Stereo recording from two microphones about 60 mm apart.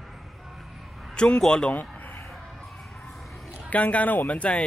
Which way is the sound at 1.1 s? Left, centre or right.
Centre.